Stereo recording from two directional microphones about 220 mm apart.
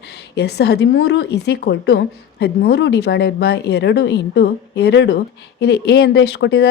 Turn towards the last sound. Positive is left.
turn(degrees=50)  # may be behind; listen again after turning